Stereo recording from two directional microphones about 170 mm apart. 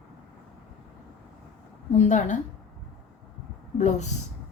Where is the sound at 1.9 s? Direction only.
45° left (ahead or behind).